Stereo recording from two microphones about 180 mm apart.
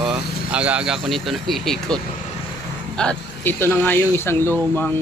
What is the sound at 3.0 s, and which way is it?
Speech, 10° left (ahead or behind).